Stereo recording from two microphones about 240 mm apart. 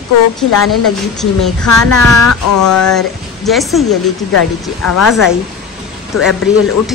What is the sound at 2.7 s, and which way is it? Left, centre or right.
A woman's voice, centre.